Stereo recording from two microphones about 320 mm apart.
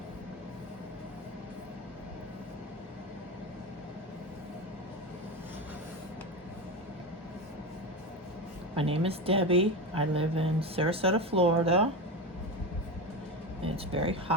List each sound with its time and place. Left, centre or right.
8.7 s a woman's voice: centre
13.7 s a woman's voice: centre